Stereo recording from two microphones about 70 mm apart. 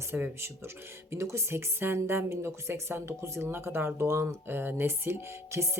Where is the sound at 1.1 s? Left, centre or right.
Right.